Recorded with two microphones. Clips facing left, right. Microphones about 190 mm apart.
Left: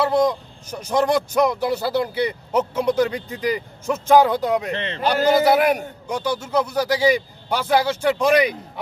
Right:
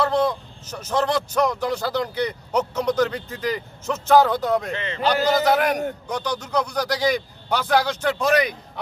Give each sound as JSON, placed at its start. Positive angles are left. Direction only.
{"t": 0.0, "sound": "speech", "side_deg": 10}